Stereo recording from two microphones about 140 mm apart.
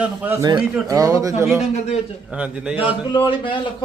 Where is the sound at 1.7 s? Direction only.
50° left (ahead or behind).